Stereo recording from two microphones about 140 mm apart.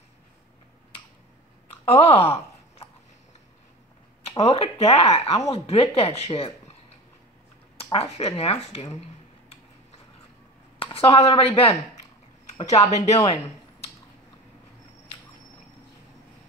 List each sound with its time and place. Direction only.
1.9 s a sound: 45° left (ahead or behind)
4.4 s speech: 45° left (ahead or behind)
7.7 s speech: 40° left (ahead or behind)
10.8 s speech: 40° left (ahead or behind)
12.9 s speech: 55° left (ahead or behind)